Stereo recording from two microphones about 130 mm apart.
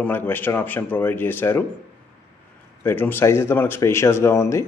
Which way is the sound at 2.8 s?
15° left (ahead or behind).